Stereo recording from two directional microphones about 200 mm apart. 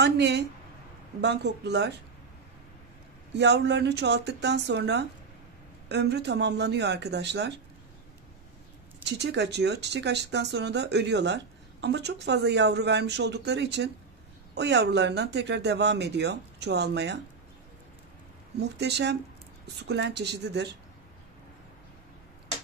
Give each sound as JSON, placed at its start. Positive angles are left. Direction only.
{"t": 0.0, "sound": "speech", "side_deg": -60}
{"t": 3.3, "sound": "speech", "side_deg": -60}
{"t": 9.0, "sound": "speech", "side_deg": -60}
{"t": 18.6, "sound": "speech", "side_deg": -55}